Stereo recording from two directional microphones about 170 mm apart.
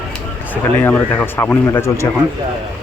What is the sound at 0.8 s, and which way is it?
Speech, 10° left (ahead or behind).